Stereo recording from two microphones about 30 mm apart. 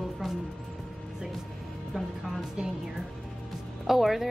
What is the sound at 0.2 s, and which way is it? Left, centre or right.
Music, centre.